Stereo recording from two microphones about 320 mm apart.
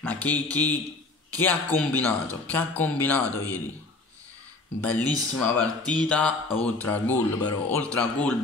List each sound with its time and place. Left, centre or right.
0.0 s a man's voice: centre
4.8 s a man's voice: centre